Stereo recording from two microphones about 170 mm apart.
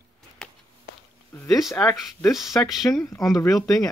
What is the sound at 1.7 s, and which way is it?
Speech, 20° left (ahead or behind).